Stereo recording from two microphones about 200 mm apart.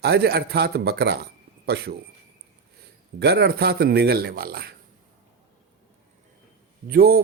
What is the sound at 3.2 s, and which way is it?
Speech, 55° right (ahead or behind).